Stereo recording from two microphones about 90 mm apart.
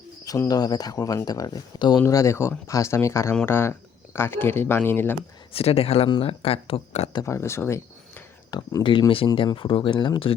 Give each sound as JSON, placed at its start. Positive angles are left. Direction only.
{"t": 0.4, "sound": "speech", "side_deg": 45}
{"t": 5.5, "sound": "speech", "side_deg": 90}
{"t": 7.3, "sound": "speech", "side_deg": 30}
{"t": 8.8, "sound": "speech", "side_deg": 65}